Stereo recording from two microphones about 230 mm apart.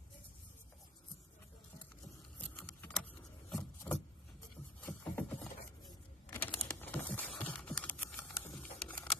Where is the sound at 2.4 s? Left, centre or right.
Centre.